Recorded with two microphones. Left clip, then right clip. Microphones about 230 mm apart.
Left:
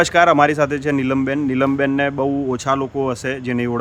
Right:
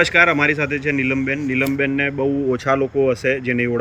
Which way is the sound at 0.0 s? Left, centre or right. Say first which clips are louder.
Left 2 dB; centre.